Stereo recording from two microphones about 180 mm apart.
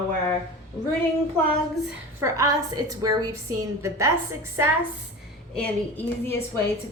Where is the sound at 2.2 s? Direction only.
20° right (ahead or behind).